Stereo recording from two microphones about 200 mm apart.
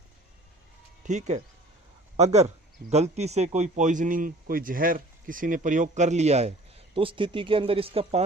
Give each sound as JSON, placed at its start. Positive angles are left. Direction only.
{"t": 1.0, "sound": "speech", "side_deg": -35}